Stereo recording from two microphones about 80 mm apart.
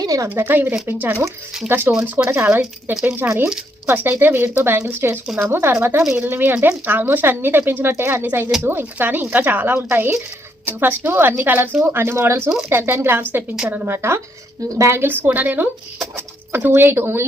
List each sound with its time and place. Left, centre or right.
0.0 s a woman's voice: right
0.3 s speech: right
5.2 s speech: centre
5.5 s speech: right
6.0 s speech: centre
6.2 s speech: right